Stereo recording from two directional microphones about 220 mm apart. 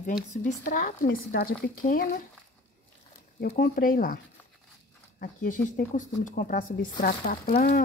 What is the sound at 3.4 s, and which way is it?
Speech, 40° left (ahead or behind).